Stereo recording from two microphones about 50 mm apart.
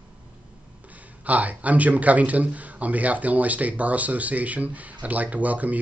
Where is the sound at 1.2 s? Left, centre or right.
Right.